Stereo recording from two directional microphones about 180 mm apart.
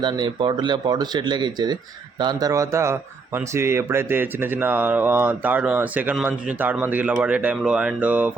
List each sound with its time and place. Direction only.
0.0 s speech: 25° right (ahead or behind); by 8.3 s 10° right (ahead or behind)